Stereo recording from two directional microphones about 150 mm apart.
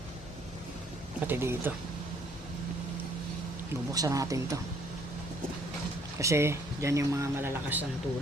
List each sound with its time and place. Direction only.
1.2 s speech: 15° right (ahead or behind)
3.9 s speech: 20° right (ahead or behind)
6.1 s speech: 20° right (ahead or behind)